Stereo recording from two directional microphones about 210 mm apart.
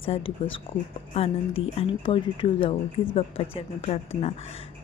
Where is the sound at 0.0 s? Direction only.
25° left (ahead or behind).